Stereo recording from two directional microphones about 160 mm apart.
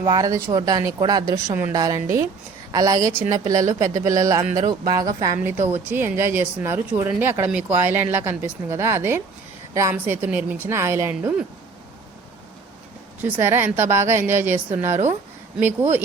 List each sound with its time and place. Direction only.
0.0 s speech: 25° right (ahead or behind)
5.9 s speech: 15° right (ahead or behind)
13.2 s speech: 15° right (ahead or behind)